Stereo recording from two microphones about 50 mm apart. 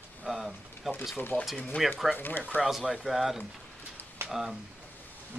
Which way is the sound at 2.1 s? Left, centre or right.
Left.